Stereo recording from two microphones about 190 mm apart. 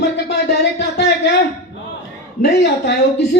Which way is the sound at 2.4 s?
65° left (ahead or behind).